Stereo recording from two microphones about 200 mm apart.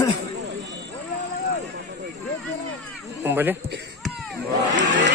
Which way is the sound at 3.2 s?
10° right (ahead or behind).